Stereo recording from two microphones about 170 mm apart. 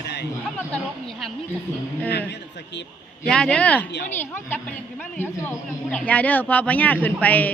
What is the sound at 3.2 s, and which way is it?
A woman's voice, 5° left (ahead or behind).